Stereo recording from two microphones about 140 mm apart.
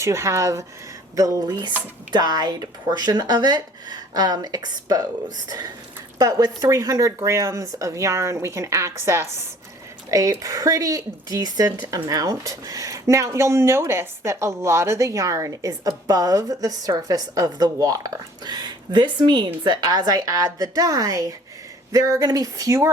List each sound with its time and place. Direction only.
0.0 s speech: 20° right (ahead or behind)